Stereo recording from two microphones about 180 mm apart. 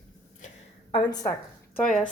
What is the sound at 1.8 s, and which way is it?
Speech, 5° left (ahead or behind).